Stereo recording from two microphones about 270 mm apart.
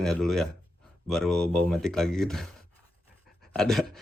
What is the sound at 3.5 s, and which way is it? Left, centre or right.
Speech, centre.